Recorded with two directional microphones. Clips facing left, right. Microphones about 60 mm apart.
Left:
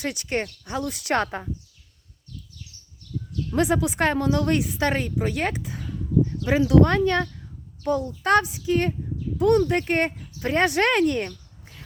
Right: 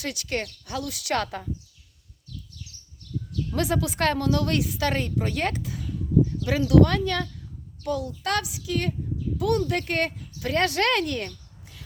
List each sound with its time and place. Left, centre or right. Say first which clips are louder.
0.0 s a woman's voice: left 3 dB; left
3.5 s a woman's voice: left 4 dB; left
4.9 s a woman's voice: left 1 dB; centre
5.6 s a sound: even; left
6.4 s a woman's voice: left 2 dB; left